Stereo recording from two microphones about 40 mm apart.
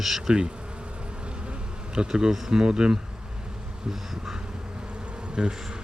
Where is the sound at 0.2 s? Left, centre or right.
Right.